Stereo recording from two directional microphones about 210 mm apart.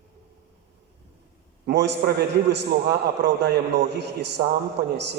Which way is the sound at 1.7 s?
55° right (ahead or behind).